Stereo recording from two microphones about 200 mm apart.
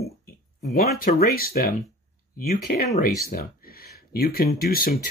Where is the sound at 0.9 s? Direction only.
45° left (ahead or behind).